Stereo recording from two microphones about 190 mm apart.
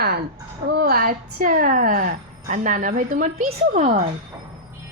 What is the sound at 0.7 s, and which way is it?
A woman's voice, 55° right (ahead or behind).